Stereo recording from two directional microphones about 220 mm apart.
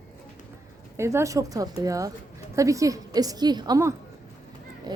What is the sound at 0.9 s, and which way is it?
A woman's voice, 10° right (ahead or behind).